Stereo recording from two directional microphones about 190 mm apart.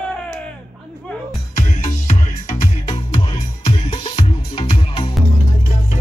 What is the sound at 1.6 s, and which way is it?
Music, 40° left (ahead or behind).